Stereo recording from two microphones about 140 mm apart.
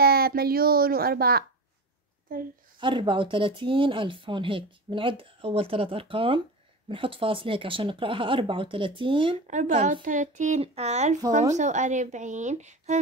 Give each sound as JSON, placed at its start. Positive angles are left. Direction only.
{"t": 0.0, "sound": "a woman's voice", "side_deg": -90}
{"t": 2.8, "sound": "speech", "side_deg": -35}
{"t": 9.5, "sound": "a woman's voice", "side_deg": -65}
{"t": 10.6, "sound": "a woman's voice", "side_deg": -50}